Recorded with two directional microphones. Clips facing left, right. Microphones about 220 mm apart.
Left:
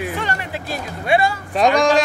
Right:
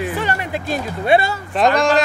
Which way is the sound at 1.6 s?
Centre (ahead or behind).